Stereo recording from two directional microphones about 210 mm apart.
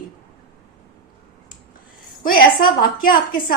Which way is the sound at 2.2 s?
45° left (ahead or behind).